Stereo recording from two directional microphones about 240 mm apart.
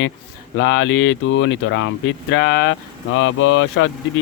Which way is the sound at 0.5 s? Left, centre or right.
Left.